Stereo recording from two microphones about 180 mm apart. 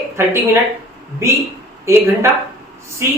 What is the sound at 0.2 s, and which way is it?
Speech, 15° right (ahead or behind).